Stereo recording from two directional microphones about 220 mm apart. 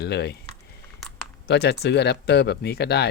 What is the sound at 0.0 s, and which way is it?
Speech, 50° left (ahead or behind).